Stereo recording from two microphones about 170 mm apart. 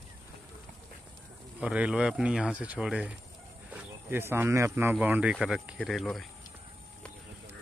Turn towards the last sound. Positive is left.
turn(degrees=0)  # may be behind; listen again after turning